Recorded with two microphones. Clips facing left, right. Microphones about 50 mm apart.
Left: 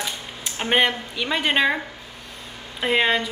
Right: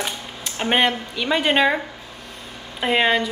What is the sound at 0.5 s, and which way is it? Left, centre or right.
A woman's voice, centre.